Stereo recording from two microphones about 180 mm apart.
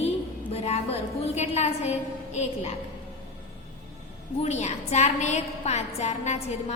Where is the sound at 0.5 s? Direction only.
35° left (ahead or behind).